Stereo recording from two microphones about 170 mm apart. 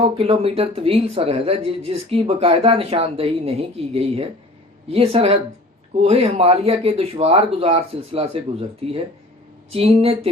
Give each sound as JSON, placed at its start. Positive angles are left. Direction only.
{"t": 0.0, "sound": "speech", "side_deg": -35}